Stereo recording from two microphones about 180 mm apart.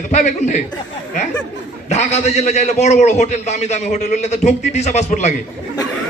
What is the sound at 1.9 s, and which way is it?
A man's voice, 40° left (ahead or behind).